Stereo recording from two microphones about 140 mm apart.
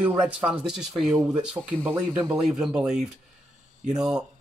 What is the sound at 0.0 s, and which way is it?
Speech, 10° right (ahead or behind).